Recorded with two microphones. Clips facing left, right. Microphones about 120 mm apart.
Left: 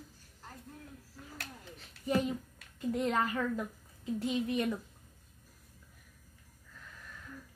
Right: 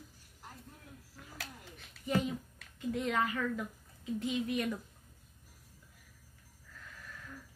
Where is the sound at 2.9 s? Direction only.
35° left (ahead or behind).